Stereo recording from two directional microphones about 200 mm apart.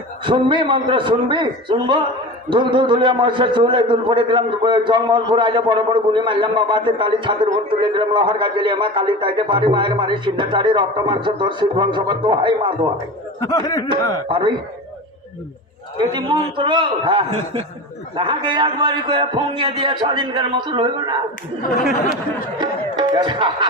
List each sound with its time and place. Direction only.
0.3 s a man's voice: 25° right (ahead or behind)
13.4 s speech: 20° left (ahead or behind)
14.3 s a man's voice: 25° right (ahead or behind)
16.1 s a man's voice: 25° right (ahead or behind)
22.5 s speech: 20° right (ahead or behind)